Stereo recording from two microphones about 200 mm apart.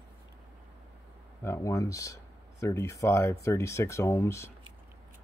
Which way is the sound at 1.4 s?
15° left (ahead or behind).